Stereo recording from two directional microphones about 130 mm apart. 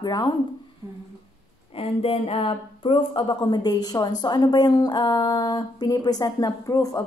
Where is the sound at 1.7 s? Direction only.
45° left (ahead or behind).